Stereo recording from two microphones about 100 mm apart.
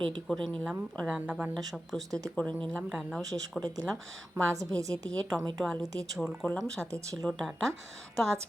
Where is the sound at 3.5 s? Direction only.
10° left (ahead or behind).